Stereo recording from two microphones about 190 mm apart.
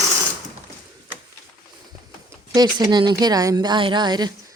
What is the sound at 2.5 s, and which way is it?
Speech, 20° right (ahead or behind).